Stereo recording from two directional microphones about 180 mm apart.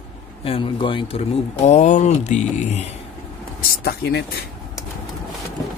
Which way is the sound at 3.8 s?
65° left (ahead or behind).